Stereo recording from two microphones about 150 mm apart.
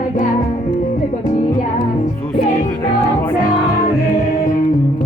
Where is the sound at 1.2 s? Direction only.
55° left (ahead or behind).